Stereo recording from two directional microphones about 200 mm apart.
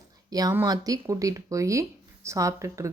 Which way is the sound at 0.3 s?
20° right (ahead or behind).